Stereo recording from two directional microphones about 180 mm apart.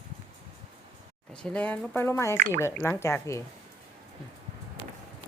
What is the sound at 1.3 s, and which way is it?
Speech, 5° left (ahead or behind).